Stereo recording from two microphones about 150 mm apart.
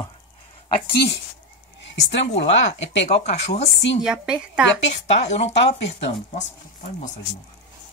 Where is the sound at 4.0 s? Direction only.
5° right (ahead or behind).